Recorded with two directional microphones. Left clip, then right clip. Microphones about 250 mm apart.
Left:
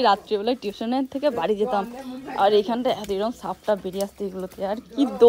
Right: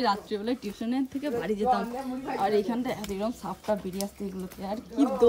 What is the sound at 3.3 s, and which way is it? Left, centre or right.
Speech, right.